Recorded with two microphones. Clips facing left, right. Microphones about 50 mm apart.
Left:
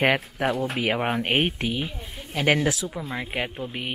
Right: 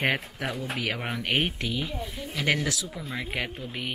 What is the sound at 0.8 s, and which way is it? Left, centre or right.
Speech, left.